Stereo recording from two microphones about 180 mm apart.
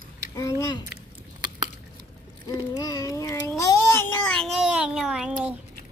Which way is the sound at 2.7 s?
20° left (ahead or behind).